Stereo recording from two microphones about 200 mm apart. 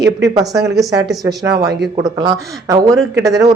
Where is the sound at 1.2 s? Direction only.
20° right (ahead or behind).